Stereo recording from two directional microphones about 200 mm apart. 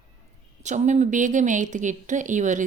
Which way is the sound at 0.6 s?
35° right (ahead or behind).